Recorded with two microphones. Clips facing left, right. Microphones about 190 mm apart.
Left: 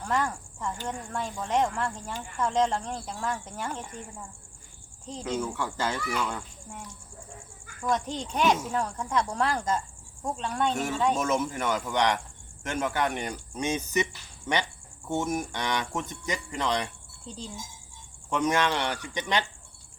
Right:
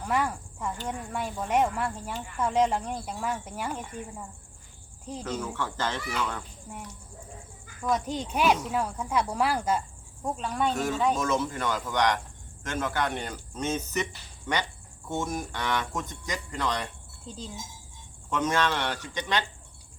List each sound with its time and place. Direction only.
0.0 s speech: 10° right (ahead or behind)
5.2 s speech: 10° left (ahead or behind)
7.9 s speech: 5° right (ahead or behind)
11.3 s speech: 20° left (ahead or behind)
17.3 s speech: centre (ahead or behind)
18.3 s speech: 15° left (ahead or behind)